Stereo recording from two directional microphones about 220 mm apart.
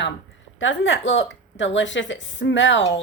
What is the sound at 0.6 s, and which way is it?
A woman's voice, 60° left (ahead or behind).